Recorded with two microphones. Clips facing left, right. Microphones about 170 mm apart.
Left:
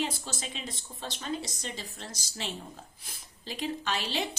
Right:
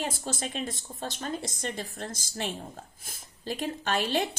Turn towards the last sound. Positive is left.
turn(degrees=-50)  # may be behind; listen again after turning